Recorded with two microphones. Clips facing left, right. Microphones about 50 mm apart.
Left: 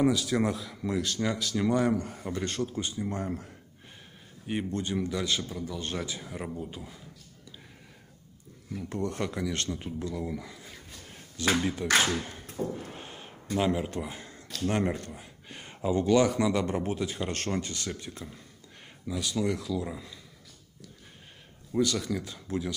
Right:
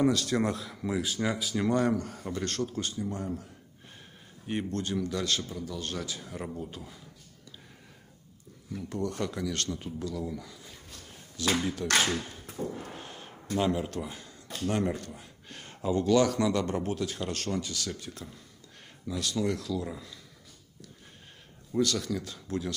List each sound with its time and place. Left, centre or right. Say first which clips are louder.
0.0 s speech: left 1 dB; centre
1.7 s speech: even; centre
3.1 s speech: left 2 dB; left
4.5 s speech: left 1 dB; centre
5.8 s speech: left 2 dB; left; by 7.0 s centre
8.7 s speech: left 1 dB; left
11.7 s speech: left 2 dB; centre
13.5 s speech: left 1 dB; centre; by 15.1 s left
15.1 s a man's voice: left 1 dB; centre
17.3 s speech: left 1 dB; left
17.8 s speech: left 1 dB; left
19.0 s speech: left 1 dB; centre
21.7 s speech: left 1 dB; centre